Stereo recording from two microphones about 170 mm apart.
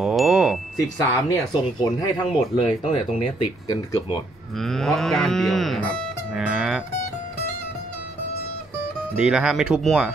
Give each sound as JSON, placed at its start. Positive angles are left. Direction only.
{"t": 0.0, "sound": "chime", "side_deg": 0}
{"t": 0.7, "sound": "speech", "side_deg": 20}
{"t": 4.6, "sound": "speech", "side_deg": 0}
{"t": 9.1, "sound": "speech", "side_deg": -5}